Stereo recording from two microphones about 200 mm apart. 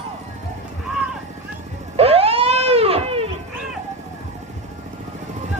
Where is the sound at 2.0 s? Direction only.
30° right (ahead or behind).